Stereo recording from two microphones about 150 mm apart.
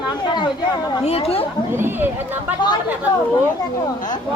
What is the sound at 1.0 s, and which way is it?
Speech, 40° left (ahead or behind).